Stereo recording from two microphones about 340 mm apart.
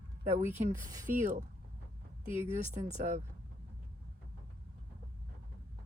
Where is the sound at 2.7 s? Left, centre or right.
Right.